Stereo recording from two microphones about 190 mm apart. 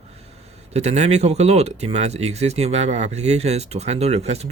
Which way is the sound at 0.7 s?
35° right (ahead or behind).